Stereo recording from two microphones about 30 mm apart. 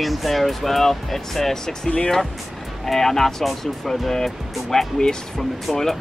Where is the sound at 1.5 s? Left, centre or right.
Centre.